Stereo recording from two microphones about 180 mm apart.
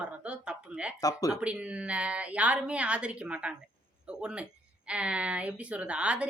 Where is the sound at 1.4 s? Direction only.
5° right (ahead or behind).